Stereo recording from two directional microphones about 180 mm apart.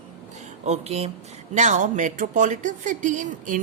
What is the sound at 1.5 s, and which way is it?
Speech, 40° right (ahead or behind).